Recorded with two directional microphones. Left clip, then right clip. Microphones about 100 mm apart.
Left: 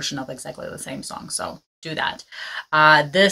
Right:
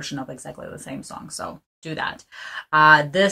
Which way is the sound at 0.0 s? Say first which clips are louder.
Left 3 dB; 30° left (ahead or behind).